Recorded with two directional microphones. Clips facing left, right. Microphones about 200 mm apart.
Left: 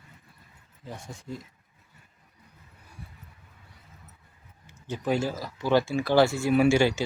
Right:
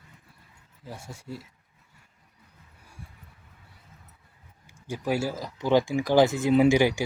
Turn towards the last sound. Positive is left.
turn(degrees=-15)  # may be behind; listen again after turning